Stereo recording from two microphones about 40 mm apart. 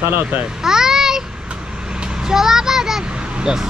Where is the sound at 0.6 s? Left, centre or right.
Centre.